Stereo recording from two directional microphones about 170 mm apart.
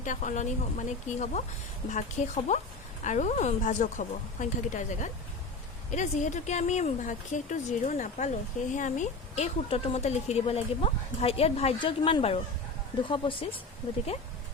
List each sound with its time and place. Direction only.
0.0 s speech: 45° left (ahead or behind); by 13.5 s 30° left (ahead or behind)